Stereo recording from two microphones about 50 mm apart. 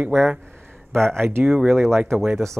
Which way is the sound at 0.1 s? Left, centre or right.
Right.